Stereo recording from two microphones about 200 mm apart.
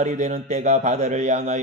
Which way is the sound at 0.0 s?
35° right (ahead or behind).